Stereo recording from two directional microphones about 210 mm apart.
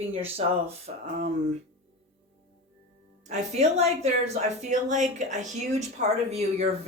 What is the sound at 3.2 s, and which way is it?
A woman's voice, 35° right (ahead or behind).